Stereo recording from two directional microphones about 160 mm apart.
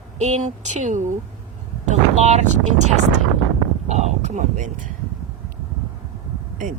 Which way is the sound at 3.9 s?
45° right (ahead or behind).